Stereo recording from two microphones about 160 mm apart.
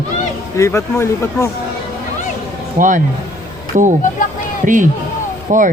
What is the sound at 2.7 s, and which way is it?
A man's voice, 55° right (ahead or behind).